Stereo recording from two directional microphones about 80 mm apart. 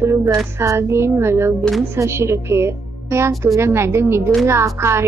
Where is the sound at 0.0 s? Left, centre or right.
Right.